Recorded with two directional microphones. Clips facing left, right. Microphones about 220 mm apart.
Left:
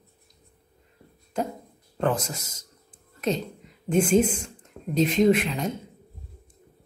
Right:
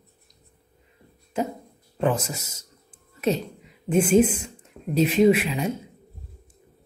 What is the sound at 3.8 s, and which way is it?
Speech, 5° right (ahead or behind).